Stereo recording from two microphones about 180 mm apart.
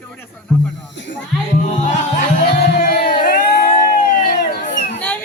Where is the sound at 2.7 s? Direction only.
50° left (ahead or behind).